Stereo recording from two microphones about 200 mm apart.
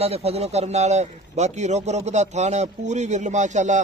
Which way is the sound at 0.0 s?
30° right (ahead or behind).